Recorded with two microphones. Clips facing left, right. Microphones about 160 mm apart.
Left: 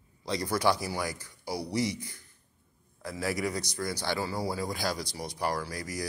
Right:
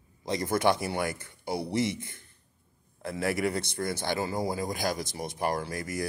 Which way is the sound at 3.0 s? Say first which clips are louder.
Right 3 dB; 55° right (ahead or behind).